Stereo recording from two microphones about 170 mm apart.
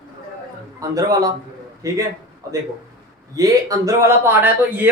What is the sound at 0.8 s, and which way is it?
A man's voice, 20° right (ahead or behind).